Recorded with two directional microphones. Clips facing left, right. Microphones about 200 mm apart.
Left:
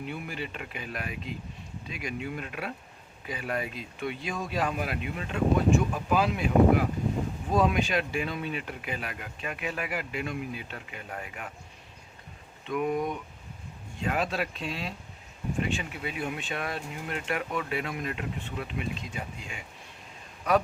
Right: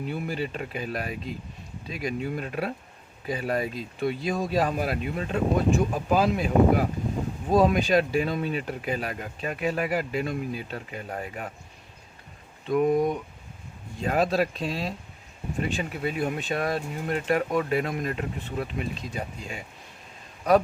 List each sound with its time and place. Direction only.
0.0 s speech: 35° right (ahead or behind)
12.6 s speech: 35° right (ahead or behind)